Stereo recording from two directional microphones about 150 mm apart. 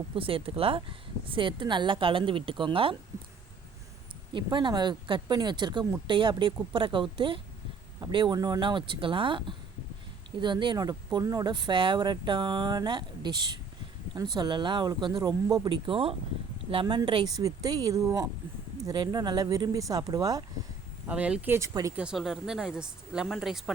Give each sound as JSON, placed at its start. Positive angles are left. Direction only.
{"t": 0.2, "sound": "speech", "side_deg": -35}
{"t": 4.3, "sound": "speech", "side_deg": -30}
{"t": 14.3, "sound": "speech", "side_deg": -30}
{"t": 21.1, "sound": "speech", "side_deg": -5}
{"t": 21.9, "sound": "speech", "side_deg": -5}